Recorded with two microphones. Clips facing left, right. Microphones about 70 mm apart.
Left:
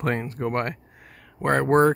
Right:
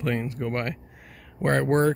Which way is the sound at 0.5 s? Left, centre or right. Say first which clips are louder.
Left 4 dB; left.